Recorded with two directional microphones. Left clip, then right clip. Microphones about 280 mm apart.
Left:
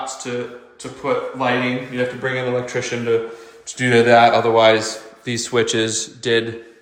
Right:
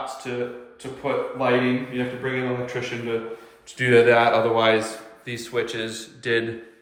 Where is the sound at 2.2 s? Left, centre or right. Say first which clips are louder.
Left 5 dB; centre.